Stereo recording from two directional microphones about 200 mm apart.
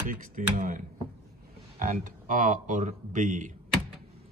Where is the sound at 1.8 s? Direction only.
40° right (ahead or behind).